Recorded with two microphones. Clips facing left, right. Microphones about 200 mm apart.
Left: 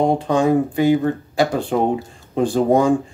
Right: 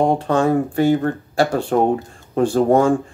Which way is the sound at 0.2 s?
15° left (ahead or behind).